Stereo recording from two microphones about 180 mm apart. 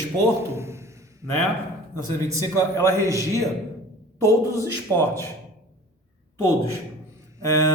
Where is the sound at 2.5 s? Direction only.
15° left (ahead or behind).